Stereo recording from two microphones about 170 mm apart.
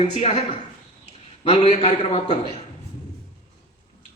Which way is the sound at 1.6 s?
40° left (ahead or behind).